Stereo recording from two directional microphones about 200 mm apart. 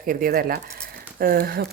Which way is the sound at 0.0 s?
45° right (ahead or behind).